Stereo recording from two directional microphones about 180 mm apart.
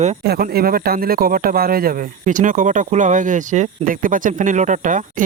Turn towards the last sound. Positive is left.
turn(degrees=-45)  # may be behind; listen again after turning